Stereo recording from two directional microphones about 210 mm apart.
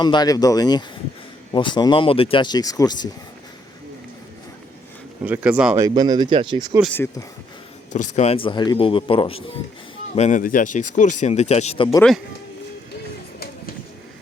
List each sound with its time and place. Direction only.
0.0 s speech: 20° left (ahead or behind)
5.2 s speech: 5° right (ahead or behind)
6.9 s speech: 10° left (ahead or behind)
7.9 s speech: 35° left (ahead or behind)